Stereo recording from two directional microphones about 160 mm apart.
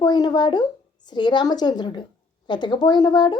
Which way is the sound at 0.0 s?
25° left (ahead or behind).